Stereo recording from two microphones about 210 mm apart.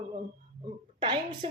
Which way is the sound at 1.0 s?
20° right (ahead or behind).